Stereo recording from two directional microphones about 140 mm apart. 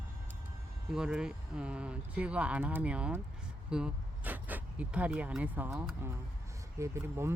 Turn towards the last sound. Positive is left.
turn(degrees=-20)  # may be behind; listen again after turning